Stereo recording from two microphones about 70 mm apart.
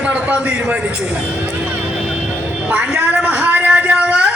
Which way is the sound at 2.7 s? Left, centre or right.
Right.